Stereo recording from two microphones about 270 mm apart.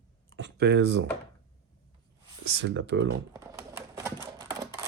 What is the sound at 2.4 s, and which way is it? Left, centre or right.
Speech, right.